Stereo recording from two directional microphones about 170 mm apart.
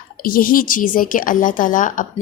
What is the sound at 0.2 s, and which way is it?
A woman's voice, 60° left (ahead or behind).